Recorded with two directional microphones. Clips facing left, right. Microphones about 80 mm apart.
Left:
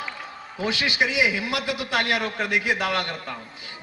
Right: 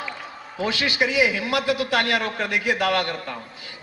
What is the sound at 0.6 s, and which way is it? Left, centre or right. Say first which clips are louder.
Music: right 1 dB; left.